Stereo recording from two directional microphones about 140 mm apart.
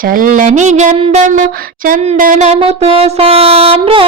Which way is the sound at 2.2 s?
60° right (ahead or behind).